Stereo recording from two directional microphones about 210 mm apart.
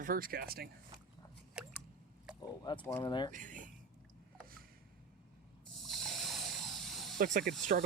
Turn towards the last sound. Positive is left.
turn(degrees=-40)  # may be behind; listen again after turning